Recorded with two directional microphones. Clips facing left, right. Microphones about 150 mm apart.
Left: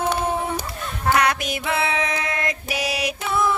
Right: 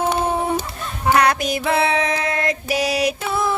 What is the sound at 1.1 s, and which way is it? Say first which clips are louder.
Music: right 5 dB; 35° right (ahead or behind).